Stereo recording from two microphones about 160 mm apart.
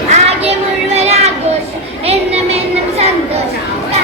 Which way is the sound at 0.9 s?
40° right (ahead or behind).